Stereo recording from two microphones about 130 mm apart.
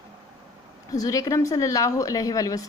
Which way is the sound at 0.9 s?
25° left (ahead or behind).